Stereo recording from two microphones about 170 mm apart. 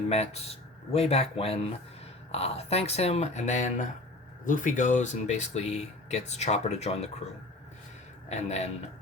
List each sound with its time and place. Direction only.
0.1 s speech: 35° left (ahead or behind)
8.3 s speech: 40° left (ahead or behind)